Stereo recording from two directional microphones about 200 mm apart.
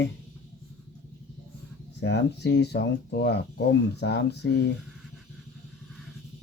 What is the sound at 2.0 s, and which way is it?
Speech, 55° left (ahead or behind).